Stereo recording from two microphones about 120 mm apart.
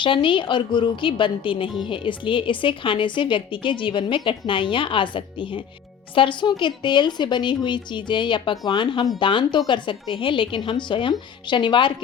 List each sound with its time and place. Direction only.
0.0 s a woman's voice: 45° left (ahead or behind)